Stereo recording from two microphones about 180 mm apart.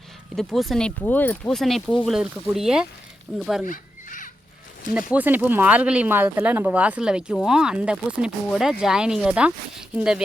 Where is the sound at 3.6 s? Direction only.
45° left (ahead or behind).